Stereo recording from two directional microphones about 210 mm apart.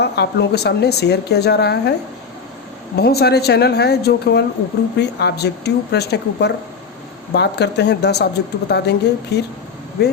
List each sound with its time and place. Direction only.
0.0 s speech: 50° left (ahead or behind)
2.9 s speech: 50° left (ahead or behind)